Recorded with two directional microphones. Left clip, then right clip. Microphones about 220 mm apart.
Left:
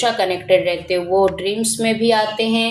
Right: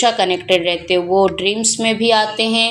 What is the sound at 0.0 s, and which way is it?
Speech, 30° right (ahead or behind).